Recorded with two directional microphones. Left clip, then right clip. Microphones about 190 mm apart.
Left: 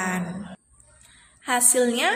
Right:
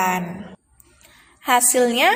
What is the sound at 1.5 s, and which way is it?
Speech, 25° right (ahead or behind).